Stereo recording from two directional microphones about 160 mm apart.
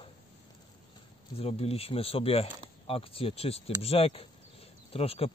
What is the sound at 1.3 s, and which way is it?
Speech, 40° left (ahead or behind).